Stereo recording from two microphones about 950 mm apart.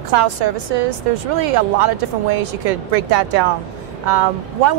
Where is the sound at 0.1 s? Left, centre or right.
Right.